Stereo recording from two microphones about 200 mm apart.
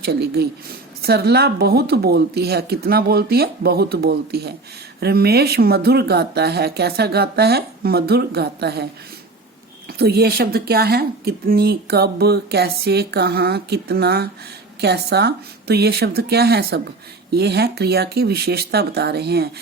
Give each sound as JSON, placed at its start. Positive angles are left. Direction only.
{"t": 0.0, "sound": "speech", "side_deg": -55}
{"t": 10.0, "sound": "speech", "side_deg": -50}